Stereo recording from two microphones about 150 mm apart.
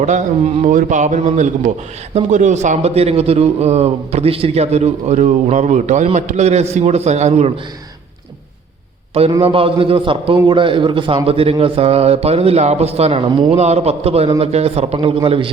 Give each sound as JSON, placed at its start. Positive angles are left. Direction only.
{"t": 0.0, "sound": "a man's voice", "side_deg": -55}
{"t": 9.4, "sound": "a man's voice", "side_deg": -40}